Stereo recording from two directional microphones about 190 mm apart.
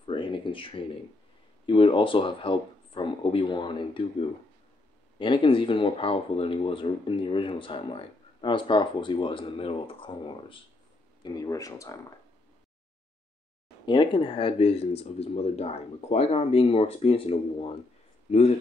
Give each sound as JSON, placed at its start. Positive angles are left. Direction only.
{"t": 0.0, "sound": "a sound", "side_deg": 25}
{"t": 1.7, "sound": "speech", "side_deg": 25}
{"t": 13.8, "sound": "speech", "side_deg": 25}